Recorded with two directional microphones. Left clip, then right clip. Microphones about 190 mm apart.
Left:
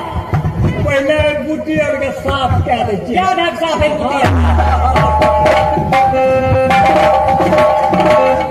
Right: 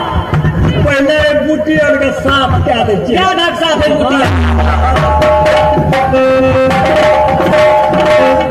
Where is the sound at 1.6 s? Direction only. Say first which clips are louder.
Right 5 dB; 45° right (ahead or behind).